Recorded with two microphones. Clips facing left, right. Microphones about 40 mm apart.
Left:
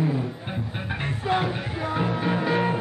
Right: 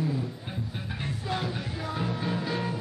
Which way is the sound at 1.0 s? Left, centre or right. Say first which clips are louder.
Left 8 dB; left.